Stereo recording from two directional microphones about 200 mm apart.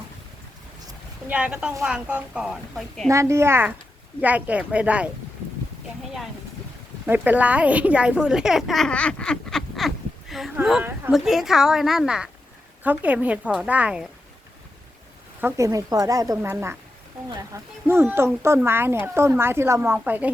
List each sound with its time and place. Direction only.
1.3 s speech: 5° right (ahead or behind)
3.1 s speech: 15° right (ahead or behind)
7.1 s speech: 10° right (ahead or behind)
15.4 s speech: 15° right (ahead or behind)